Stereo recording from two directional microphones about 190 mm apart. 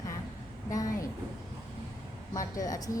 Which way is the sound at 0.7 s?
20° left (ahead or behind).